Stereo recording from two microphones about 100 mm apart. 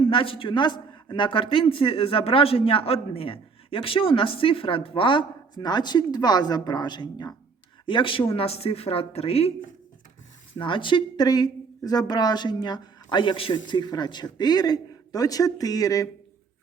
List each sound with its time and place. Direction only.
0.1 s speech: 65° left (ahead or behind)
5.5 s a woman's voice: 45° left (ahead or behind)
7.9 s speech: 55° left (ahead or behind); by 9.5 s 90° left
10.6 s a woman's voice: 55° left (ahead or behind); by 16.0 s 35° left (ahead or behind)